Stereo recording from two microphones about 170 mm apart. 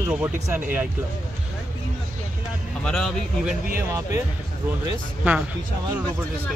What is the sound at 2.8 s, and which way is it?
Speech, 5° left (ahead or behind).